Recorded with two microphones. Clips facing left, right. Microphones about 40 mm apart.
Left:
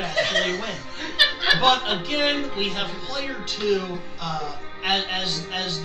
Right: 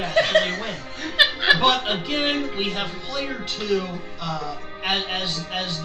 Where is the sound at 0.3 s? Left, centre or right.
Right.